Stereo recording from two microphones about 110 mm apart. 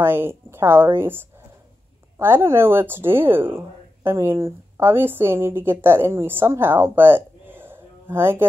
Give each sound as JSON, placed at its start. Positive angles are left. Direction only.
{"t": 0.0, "sound": "a woman's voice", "side_deg": -20}